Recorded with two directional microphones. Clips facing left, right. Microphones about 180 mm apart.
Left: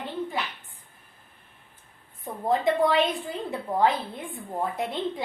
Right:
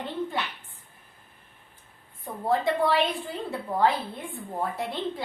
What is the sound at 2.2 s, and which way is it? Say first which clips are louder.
A woman's voice: left 1 dB; 20° left (ahead or behind).